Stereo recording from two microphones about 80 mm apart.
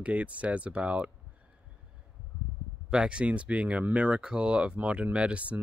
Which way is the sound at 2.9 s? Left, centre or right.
Centre.